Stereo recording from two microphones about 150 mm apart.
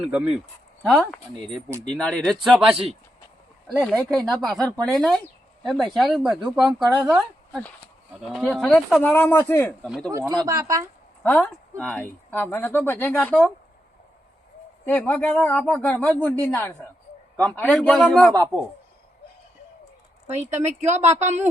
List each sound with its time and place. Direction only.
0.0 s speech: 5° right (ahead or behind)
0.9 s speech: 5° left (ahead or behind)
8.3 s speech: centre (ahead or behind)
9.1 s speech: 15° left (ahead or behind)
10.1 s speech: 20° right (ahead or behind)
11.2 s speech: 10° left (ahead or behind)
14.8 s speech: 10° left (ahead or behind)
20.3 s speech: 50° right (ahead or behind)